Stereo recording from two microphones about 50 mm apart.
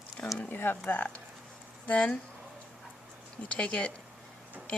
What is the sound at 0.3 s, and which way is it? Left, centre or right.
Speech, left.